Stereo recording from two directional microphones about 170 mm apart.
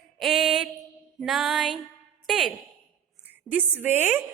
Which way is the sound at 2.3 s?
Centre (ahead or behind).